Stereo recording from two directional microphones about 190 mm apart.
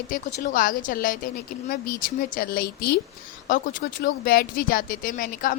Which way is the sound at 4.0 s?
55° left (ahead or behind).